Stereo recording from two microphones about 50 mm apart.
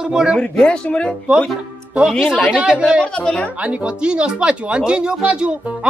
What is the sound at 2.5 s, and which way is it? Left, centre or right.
Speech, centre.